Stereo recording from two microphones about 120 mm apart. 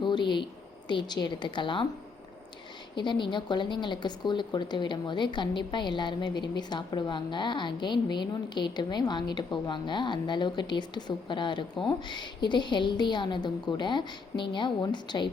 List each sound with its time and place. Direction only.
0.0 s speech: 40° left (ahead or behind)
2.9 s speech: 40° left (ahead or behind)